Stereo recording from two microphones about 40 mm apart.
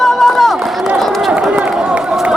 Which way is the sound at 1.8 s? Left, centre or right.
Right.